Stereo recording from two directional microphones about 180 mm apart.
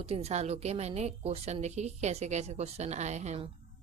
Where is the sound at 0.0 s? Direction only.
35° right (ahead or behind).